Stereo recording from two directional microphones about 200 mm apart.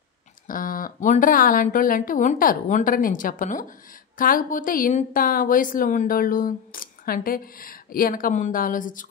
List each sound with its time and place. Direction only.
0.5 s a woman's voice: 45° left (ahead or behind)